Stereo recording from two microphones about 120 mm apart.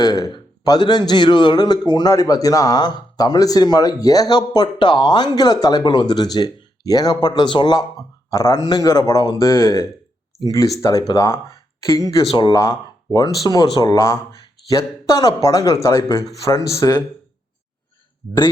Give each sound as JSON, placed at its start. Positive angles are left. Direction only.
{"t": 0.0, "sound": "a man's voice", "side_deg": 30}